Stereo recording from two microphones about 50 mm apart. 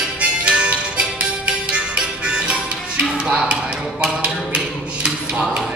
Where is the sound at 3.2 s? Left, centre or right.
Centre.